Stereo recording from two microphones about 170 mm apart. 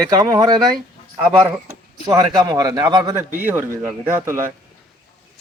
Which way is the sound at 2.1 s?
20° right (ahead or behind).